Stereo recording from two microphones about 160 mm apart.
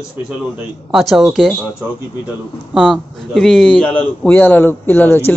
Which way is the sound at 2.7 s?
Centre (ahead or behind).